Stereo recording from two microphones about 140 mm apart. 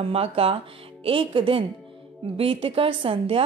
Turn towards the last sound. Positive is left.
turn(degrees=-40)  # may be behind; listen again after turning